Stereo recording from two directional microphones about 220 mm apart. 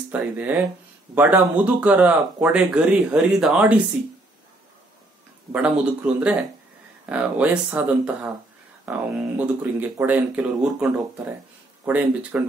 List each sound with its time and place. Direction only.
0.1 s speech: 5° right (ahead or behind)
5.5 s speech: 5° right (ahead or behind)